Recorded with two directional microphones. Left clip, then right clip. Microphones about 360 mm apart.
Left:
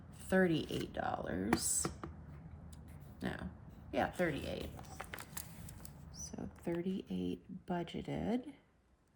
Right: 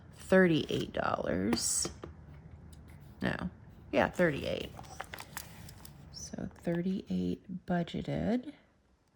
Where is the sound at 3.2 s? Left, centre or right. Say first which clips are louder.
Right 8 dB; centre.